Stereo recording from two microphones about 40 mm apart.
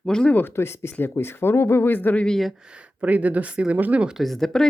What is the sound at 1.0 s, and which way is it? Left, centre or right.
Speech, left.